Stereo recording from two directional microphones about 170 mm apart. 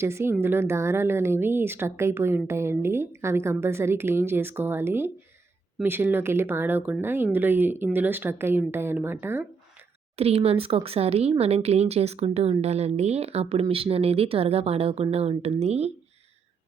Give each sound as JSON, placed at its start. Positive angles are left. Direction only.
{"t": 0.0, "sound": "speech", "side_deg": -15}
{"t": 10.2, "sound": "speech", "side_deg": -35}